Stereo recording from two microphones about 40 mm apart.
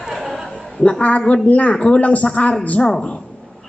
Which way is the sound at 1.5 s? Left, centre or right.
Left.